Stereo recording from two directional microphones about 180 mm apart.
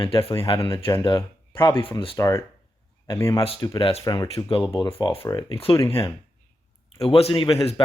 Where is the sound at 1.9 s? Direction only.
30° left (ahead or behind).